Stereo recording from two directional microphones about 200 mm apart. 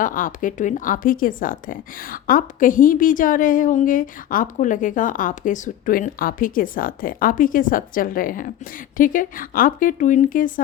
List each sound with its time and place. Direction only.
0.0 s speech: 40° left (ahead or behind)